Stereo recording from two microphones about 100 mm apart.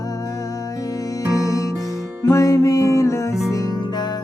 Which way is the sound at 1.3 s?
35° left (ahead or behind).